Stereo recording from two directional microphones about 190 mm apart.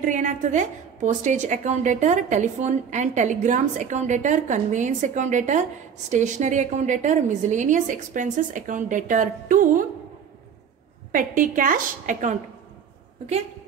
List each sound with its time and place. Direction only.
0.0 s a woman's voice: 40° right (ahead or behind)
11.1 s a woman's voice: 45° right (ahead or behind)